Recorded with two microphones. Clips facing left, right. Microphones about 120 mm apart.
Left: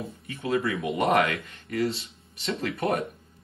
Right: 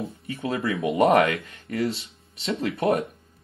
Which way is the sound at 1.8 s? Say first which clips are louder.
Right 1 dB; 30° left (ahead or behind).